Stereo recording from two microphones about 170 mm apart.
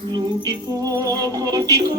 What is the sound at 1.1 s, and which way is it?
Music, 20° right (ahead or behind).